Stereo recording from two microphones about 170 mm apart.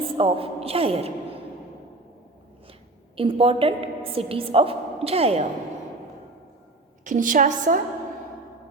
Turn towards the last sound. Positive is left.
turn(degrees=-50)  # may be behind; listen again after turning